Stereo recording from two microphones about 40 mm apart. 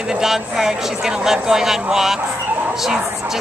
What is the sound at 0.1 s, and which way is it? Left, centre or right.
Speech, centre.